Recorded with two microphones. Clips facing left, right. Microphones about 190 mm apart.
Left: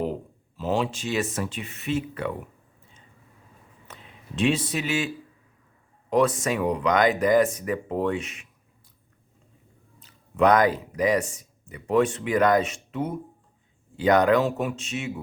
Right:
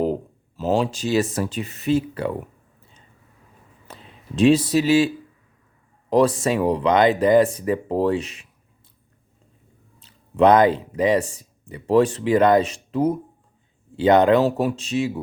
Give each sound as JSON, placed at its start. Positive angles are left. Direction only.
{"t": 0.0, "sound": "speech", "side_deg": -40}
{"t": 3.8, "sound": "speech", "side_deg": -35}
{"t": 10.0, "sound": "speech", "side_deg": -30}